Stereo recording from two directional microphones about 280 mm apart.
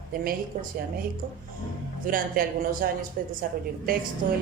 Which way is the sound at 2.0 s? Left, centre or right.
Right.